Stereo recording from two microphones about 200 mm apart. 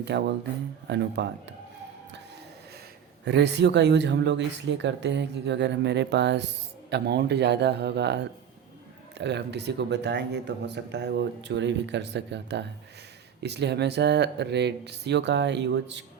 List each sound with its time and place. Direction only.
0.1 s speech: 60° right (ahead or behind)
3.2 s speech: 60° right (ahead or behind)